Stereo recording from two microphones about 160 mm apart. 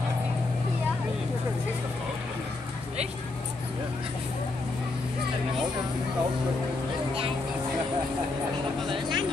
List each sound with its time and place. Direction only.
8.8 s vehicle: 30° right (ahead or behind)